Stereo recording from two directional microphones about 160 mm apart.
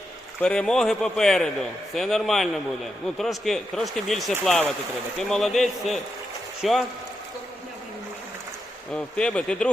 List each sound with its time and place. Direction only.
0.4 s a man's voice: 5° left (ahead or behind)
8.9 s speech: 5° left (ahead or behind)